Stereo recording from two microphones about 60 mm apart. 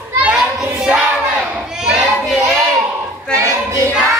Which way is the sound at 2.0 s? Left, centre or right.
Centre.